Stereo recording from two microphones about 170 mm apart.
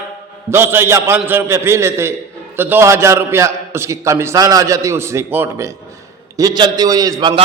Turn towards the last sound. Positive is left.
turn(degrees=-25)  # may be behind; listen again after turning